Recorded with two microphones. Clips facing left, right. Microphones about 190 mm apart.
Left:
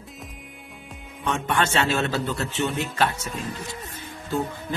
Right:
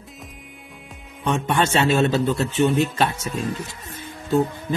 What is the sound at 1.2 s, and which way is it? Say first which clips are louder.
A man's voice: right 3 dB; 20° right (ahead or behind).